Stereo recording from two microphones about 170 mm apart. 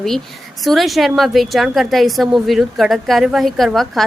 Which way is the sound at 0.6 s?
Centre (ahead or behind).